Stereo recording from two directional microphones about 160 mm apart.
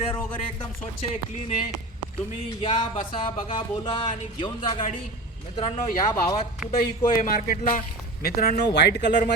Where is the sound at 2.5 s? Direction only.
30° left (ahead or behind).